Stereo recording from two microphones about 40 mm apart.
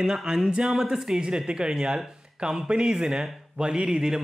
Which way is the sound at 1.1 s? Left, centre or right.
Right.